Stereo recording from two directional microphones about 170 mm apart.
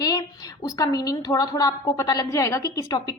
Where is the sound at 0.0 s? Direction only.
20° left (ahead or behind).